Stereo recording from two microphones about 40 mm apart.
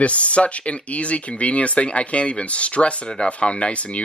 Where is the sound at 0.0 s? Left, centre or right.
Left.